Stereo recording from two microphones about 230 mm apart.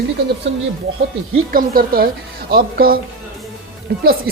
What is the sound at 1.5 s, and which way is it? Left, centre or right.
A woman's voice, right.